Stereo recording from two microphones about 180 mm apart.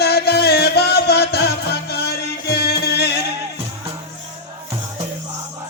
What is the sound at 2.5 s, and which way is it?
Music, 65° left (ahead or behind).